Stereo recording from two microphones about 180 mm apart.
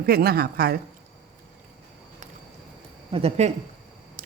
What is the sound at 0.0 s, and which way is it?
Speech, 60° right (ahead or behind).